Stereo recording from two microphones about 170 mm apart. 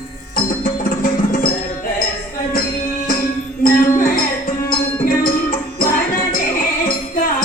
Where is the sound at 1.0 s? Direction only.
55° left (ahead or behind).